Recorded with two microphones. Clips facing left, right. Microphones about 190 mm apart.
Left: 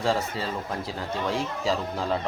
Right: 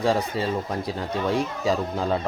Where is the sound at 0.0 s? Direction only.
15° right (ahead or behind).